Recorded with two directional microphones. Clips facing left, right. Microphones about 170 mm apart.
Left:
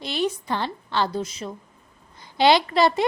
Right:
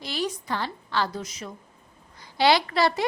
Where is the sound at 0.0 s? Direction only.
25° left (ahead or behind).